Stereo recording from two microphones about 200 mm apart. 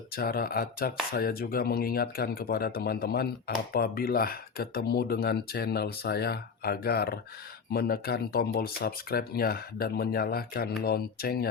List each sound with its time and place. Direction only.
0.1 s speech: 50° left (ahead or behind)